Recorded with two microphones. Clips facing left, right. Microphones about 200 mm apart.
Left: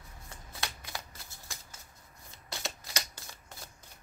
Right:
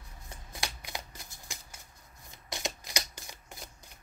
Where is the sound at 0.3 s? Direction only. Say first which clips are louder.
Right 1 dB; 15° right (ahead or behind).